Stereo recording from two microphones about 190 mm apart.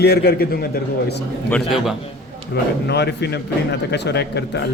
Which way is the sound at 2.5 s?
60° left (ahead or behind).